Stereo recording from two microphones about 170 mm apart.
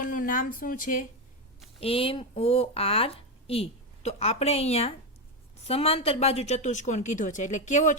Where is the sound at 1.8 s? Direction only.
35° left (ahead or behind).